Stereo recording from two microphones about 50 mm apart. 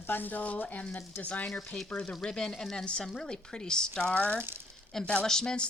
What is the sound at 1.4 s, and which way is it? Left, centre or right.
Speech, centre.